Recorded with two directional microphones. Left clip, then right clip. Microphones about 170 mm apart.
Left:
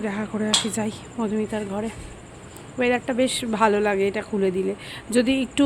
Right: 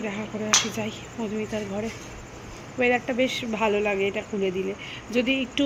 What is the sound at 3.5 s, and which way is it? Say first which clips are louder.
Speech: left 7 dB; 35° left (ahead or behind).